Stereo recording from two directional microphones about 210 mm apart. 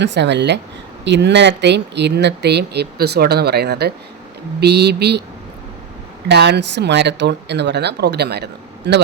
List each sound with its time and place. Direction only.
0.0 s speech: 55° right (ahead or behind)
6.2 s speech: 50° right (ahead or behind)